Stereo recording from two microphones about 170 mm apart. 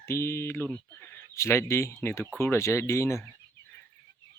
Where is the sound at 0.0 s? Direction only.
15° left (ahead or behind).